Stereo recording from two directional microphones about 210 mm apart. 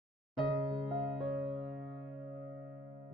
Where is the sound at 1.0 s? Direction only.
Centre (ahead or behind).